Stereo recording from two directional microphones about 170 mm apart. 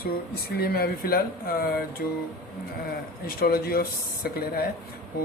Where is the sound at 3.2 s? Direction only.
60° left (ahead or behind).